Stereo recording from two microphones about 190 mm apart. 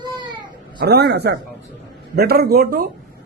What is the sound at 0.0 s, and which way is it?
Baby cry, 25° right (ahead or behind).